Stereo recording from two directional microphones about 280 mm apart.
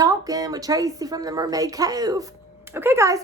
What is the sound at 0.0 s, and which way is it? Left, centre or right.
A woman's voice, centre.